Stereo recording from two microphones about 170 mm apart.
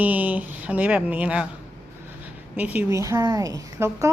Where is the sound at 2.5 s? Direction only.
10° right (ahead or behind).